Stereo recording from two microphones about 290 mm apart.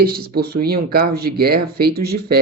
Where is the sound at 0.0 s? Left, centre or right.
Right.